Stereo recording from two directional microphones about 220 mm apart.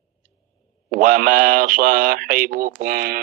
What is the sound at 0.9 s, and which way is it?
Speech, 40° right (ahead or behind).